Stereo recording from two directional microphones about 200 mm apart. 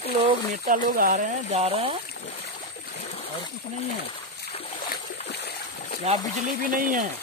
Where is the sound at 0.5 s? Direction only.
45° right (ahead or behind).